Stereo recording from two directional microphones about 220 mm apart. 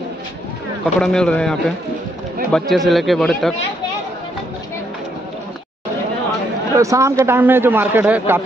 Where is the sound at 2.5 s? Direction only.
Centre (ahead or behind).